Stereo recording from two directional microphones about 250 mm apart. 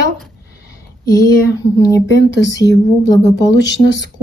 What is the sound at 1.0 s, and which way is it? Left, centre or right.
Speech, centre.